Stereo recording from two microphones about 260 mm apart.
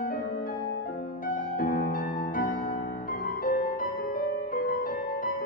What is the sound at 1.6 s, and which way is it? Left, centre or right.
Music, left.